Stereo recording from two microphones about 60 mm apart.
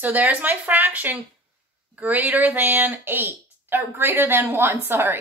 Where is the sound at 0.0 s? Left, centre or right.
Right.